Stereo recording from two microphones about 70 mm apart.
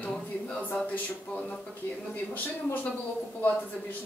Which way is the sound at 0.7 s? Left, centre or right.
Centre.